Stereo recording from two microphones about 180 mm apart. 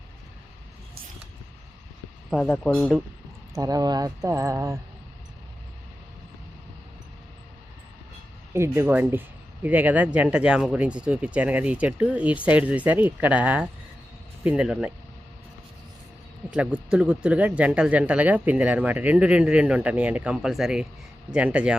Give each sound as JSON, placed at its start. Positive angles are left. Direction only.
{"t": 2.3, "sound": "speech", "side_deg": 5}
{"t": 3.5, "sound": "speech", "side_deg": -20}
{"t": 8.5, "sound": "speech", "side_deg": -15}
{"t": 16.5, "sound": "speech", "side_deg": -5}